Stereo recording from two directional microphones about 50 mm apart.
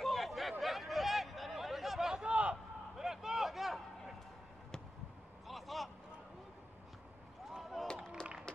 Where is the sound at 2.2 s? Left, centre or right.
Right.